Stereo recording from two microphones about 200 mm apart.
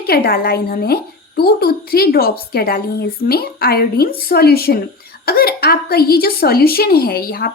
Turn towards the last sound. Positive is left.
turn(degrees=50)  # may be behind; listen again after turning